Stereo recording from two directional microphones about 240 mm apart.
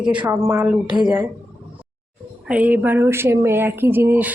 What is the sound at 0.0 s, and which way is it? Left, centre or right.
Speech, centre.